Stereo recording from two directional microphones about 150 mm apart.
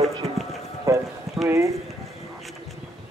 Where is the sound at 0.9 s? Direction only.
20° right (ahead or behind).